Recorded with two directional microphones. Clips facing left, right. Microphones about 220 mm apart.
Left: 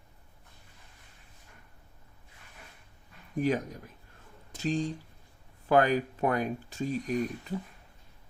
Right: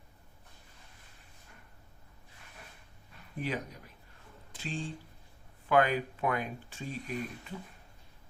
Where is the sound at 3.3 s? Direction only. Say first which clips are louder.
Left 8 dB; 45° left (ahead or behind).